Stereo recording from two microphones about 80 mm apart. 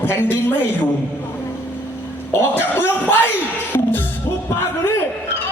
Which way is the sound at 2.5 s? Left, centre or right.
Left.